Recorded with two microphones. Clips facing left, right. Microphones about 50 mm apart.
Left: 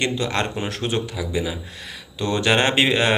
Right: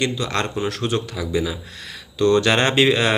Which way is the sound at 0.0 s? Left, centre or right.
Left.